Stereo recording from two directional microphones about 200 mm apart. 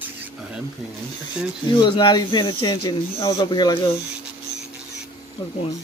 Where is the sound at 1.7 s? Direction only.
20° left (ahead or behind).